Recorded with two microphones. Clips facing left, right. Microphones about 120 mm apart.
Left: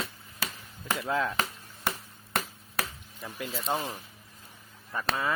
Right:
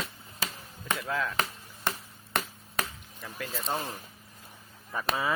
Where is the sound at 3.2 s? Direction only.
15° left (ahead or behind).